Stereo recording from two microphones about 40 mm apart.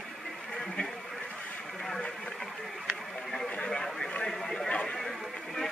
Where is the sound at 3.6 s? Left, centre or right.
Centre.